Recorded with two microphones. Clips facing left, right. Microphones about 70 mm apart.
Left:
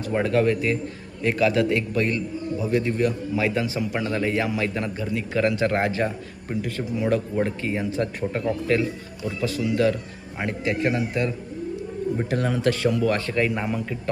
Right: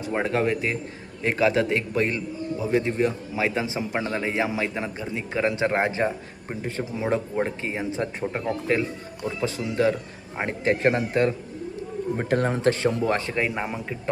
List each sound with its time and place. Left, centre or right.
0.0 s a man's voice: right